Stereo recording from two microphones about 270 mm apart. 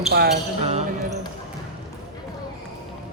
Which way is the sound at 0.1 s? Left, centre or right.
Right.